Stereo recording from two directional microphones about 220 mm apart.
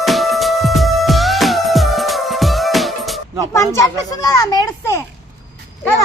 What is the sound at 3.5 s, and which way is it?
Speech, 15° left (ahead or behind).